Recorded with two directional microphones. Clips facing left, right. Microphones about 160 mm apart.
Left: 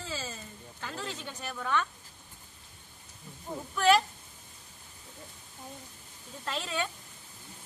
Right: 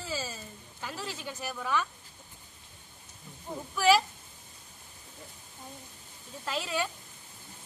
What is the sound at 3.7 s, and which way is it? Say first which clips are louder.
Speech: even; 5° right (ahead or behind).